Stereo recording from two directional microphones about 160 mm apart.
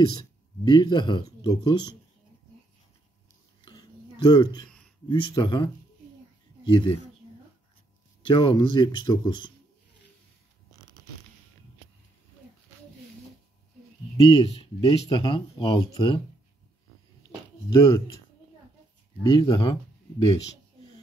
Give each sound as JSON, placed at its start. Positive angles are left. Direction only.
{"t": 0.2, "sound": "speech", "side_deg": 30}
{"t": 3.6, "sound": "a sound", "side_deg": 30}
{"t": 5.0, "sound": "speech", "side_deg": 30}
{"t": 8.2, "sound": "speech", "side_deg": 30}
{"t": 14.3, "sound": "speech", "side_deg": 35}
{"t": 17.6, "sound": "speech", "side_deg": 20}
{"t": 19.2, "sound": "speech", "side_deg": 30}